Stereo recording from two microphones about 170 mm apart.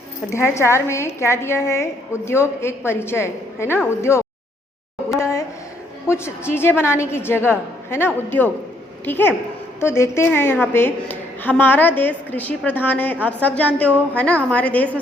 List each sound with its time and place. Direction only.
0.3 s a woman's voice: 15° left (ahead or behind)
6.1 s a woman's voice: 15° left (ahead or behind)